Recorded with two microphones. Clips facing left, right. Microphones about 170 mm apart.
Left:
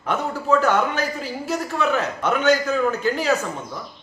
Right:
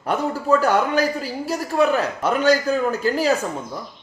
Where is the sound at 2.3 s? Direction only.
35° right (ahead or behind).